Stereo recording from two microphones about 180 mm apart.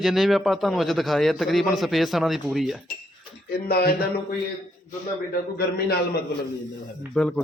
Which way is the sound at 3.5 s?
60° left (ahead or behind).